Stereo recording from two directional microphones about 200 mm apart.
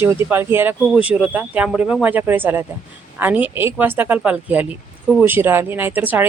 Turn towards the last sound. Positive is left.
turn(degrees=-10)  # may be behind; listen again after turning